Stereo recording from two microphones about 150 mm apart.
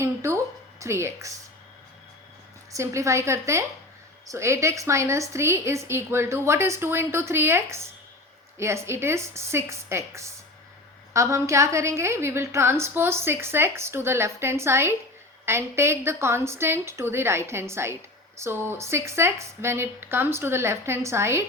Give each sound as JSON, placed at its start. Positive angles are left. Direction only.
{"t": 0.0, "sound": "a sound", "side_deg": -20}
{"t": 0.8, "sound": "a woman's voice", "side_deg": -20}
{"t": 2.7, "sound": "a woman's voice", "side_deg": -20}